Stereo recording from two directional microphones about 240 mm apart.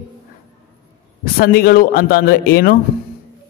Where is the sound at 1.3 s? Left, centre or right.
Left.